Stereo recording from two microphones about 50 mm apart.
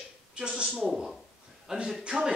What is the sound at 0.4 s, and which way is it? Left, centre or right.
Speech, centre.